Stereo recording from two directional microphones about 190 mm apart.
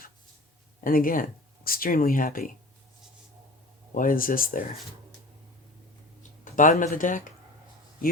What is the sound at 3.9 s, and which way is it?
Speech, 45° left (ahead or behind).